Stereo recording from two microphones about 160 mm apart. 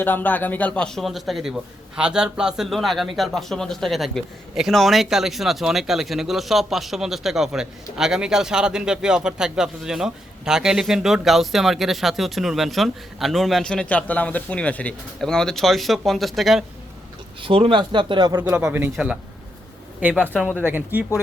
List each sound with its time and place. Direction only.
0.0 s a man's voice: 10° left (ahead or behind)
17.4 s speech: 35° right (ahead or behind)
18.3 s speech: 10° right (ahead or behind)